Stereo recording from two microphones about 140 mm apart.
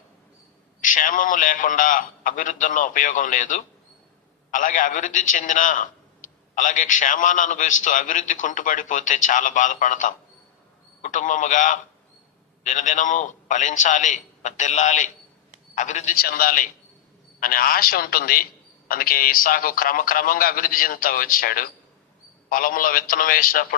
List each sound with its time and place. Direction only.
0.8 s a man's voice: 70° left (ahead or behind); by 23.6 s 85° left